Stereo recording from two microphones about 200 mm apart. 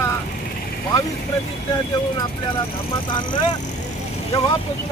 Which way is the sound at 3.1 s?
25° left (ahead or behind).